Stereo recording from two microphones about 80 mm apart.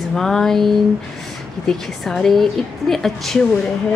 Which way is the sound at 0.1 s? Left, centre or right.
Centre.